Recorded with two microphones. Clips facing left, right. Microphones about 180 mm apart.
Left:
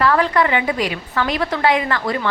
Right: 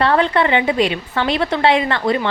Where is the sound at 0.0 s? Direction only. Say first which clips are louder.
Right 1 dB; 30° right (ahead or behind).